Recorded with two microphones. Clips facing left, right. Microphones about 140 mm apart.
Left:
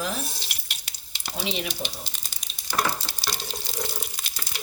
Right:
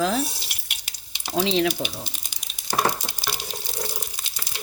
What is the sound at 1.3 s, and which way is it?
Speech, 90° right.